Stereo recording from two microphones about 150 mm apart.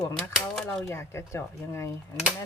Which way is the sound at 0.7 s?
20° left (ahead or behind).